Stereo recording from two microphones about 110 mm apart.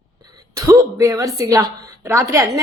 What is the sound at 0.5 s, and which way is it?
A woman's voice, 30° right (ahead or behind).